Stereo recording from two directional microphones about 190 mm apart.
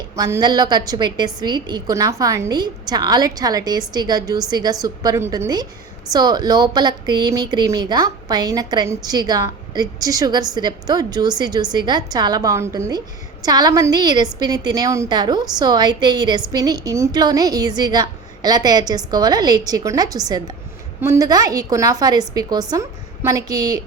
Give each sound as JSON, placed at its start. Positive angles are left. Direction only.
{"t": 0.2, "sound": "a woman's voice", "side_deg": -20}